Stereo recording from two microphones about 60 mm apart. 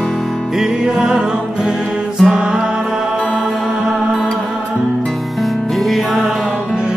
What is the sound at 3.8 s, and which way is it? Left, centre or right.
Music, centre.